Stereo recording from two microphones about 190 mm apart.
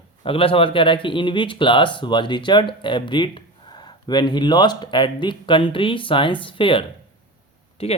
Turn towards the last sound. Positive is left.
turn(degrees=30)  # may be behind; listen again after turning